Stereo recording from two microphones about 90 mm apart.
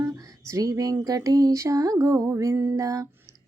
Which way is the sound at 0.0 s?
40° right (ahead or behind).